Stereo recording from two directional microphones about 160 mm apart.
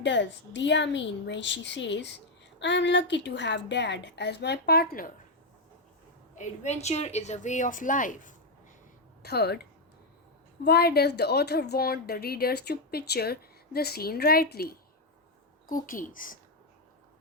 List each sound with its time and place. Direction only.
0.0 s a woman's voice: 90° left; by 5.1 s 65° left (ahead or behind)
6.3 s a woman's voice: 50° left (ahead or behind)
9.2 s a woman's voice: 90° left
15.6 s a woman's voice: 60° left (ahead or behind)